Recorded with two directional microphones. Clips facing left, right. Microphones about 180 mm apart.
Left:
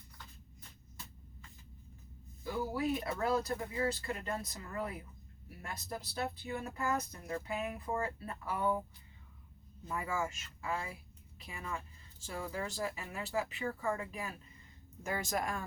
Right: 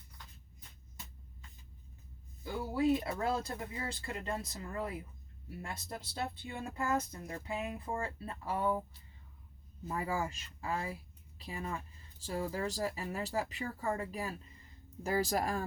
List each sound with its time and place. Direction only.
2.4 s speech: 25° right (ahead or behind)
5.6 s speech: 25° right (ahead or behind)
9.9 s a woman's voice: 35° right (ahead or behind)